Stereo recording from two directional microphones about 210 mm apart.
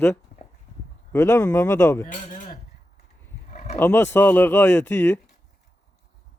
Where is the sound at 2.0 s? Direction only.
40° left (ahead or behind).